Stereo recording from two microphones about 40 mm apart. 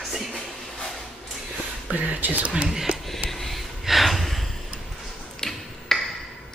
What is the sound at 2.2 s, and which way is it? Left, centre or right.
Speech, right.